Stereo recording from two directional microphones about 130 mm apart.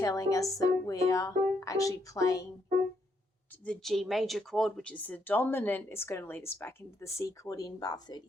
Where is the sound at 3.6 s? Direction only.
Centre (ahead or behind).